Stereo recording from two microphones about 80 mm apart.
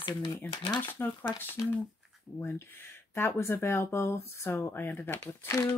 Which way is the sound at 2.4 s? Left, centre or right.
Left.